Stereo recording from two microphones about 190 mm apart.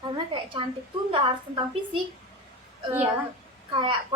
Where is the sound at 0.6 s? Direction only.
30° right (ahead or behind).